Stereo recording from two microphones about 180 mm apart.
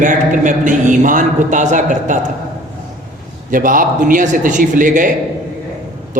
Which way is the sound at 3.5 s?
50° right (ahead or behind).